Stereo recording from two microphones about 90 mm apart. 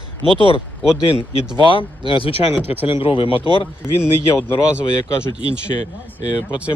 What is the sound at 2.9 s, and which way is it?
Speech, 75° left (ahead or behind).